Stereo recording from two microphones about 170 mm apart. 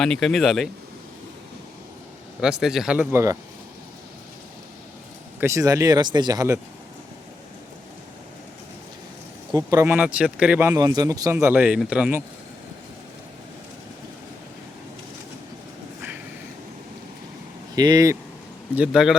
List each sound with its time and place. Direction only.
0.0 s speech: 5° left (ahead or behind)
2.4 s speech: 5° right (ahead or behind)
5.4 s speech: 20° right (ahead or behind)
9.5 s speech: 20° right (ahead or behind)
17.7 s speech: 20° right (ahead or behind)
18.7 s speech: 5° right (ahead or behind)